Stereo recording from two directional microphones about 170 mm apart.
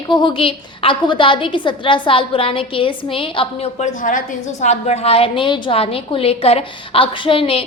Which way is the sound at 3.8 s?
50° left (ahead or behind).